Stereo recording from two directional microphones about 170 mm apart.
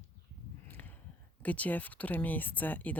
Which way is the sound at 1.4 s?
10° left (ahead or behind).